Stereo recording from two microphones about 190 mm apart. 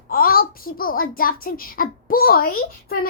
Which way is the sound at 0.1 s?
50° left (ahead or behind).